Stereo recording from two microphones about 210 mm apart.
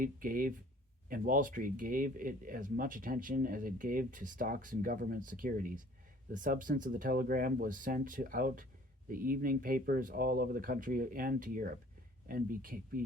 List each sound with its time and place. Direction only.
0.0 s speech: 40° right (ahead or behind)